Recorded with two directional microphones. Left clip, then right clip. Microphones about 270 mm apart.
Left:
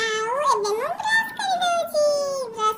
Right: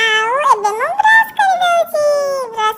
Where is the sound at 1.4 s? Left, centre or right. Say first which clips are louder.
Right 10 dB; right.